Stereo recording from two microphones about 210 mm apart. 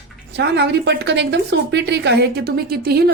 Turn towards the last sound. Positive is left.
turn(degrees=-45)  # may be behind; listen again after turning